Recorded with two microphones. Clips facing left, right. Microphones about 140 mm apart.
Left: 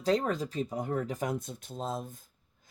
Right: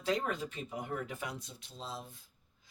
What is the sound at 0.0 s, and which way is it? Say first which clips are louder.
Speech: left 6 dB; 35° left (ahead or behind).